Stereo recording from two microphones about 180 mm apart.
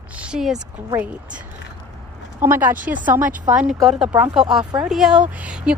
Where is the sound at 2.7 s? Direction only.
45° right (ahead or behind).